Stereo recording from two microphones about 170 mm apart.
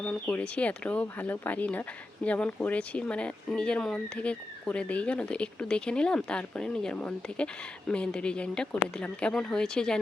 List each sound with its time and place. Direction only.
0.0 s speech: 5° left (ahead or behind)